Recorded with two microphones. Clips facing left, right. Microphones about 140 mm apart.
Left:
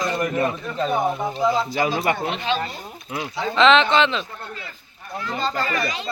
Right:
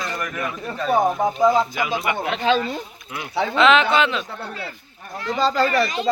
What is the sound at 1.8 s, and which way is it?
Speech, 40° left (ahead or behind).